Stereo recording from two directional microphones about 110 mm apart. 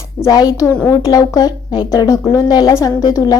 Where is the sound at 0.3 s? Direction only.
35° left (ahead or behind).